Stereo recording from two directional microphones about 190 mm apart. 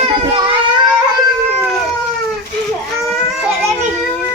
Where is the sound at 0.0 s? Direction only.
25° right (ahead or behind).